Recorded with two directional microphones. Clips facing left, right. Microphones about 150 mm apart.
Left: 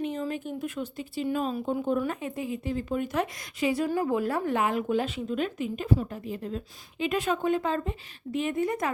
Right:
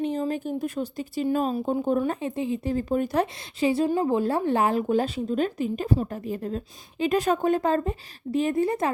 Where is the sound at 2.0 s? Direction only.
30° right (ahead or behind).